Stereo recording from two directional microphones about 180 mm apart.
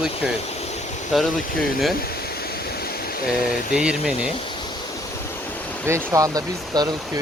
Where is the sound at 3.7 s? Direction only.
5° right (ahead or behind).